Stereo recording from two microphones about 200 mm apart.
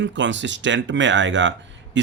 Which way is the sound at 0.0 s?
65° right (ahead or behind).